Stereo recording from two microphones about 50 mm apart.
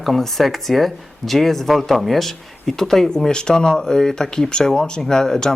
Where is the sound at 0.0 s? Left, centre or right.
Centre.